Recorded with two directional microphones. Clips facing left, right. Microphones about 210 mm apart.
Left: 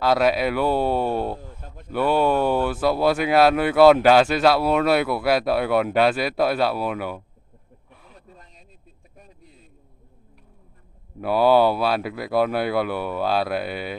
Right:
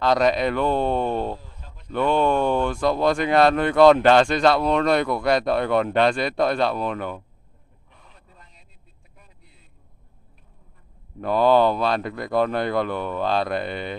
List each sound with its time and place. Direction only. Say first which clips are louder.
0.0 s speech: even; 5° left (ahead or behind)
1.4 s a sound: left 6 dB; 50° left (ahead or behind)
1.9 s speech: even; 5° left (ahead or behind)
11.1 s speech: left 1 dB; 10° left (ahead or behind)